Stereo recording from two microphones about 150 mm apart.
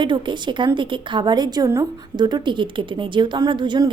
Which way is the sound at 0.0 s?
30° right (ahead or behind).